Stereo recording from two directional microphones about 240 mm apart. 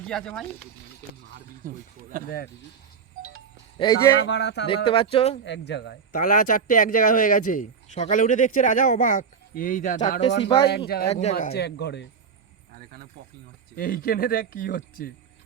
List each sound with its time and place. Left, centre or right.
0.0 s speech: centre
1.6 s speech: right
3.8 s speech: centre
4.3 s speech: left
5.1 s speech: left
5.5 s speech: left
6.1 s speech: left
10.7 s speech: left
11.1 s speech: left
11.5 s speech: left
13.7 s speech: left